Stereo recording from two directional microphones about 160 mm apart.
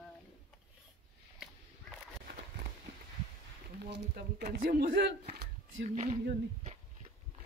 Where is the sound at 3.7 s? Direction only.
90° right.